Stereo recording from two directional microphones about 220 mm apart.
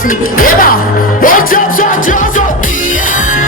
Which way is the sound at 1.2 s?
40° left (ahead or behind).